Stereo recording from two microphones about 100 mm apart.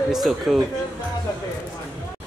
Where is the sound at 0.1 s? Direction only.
Centre (ahead or behind).